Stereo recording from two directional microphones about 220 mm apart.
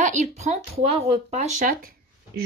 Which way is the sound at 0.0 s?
35° right (ahead or behind).